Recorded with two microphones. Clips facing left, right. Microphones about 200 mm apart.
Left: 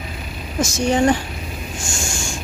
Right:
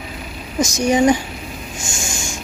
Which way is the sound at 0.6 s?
15° right (ahead or behind).